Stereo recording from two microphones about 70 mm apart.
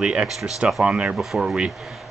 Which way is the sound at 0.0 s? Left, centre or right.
Centre.